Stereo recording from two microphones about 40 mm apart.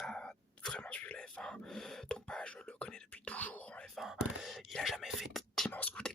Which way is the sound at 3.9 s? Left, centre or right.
Centre.